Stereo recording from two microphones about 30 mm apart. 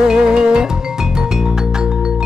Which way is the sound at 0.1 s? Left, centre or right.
Right.